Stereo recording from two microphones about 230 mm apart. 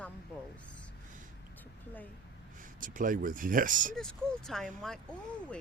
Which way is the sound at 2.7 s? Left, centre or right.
Right.